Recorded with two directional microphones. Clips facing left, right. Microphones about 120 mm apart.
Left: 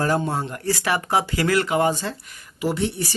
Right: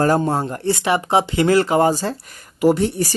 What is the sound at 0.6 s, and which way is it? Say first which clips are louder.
Speech: right 3 dB; 25° right (ahead or behind).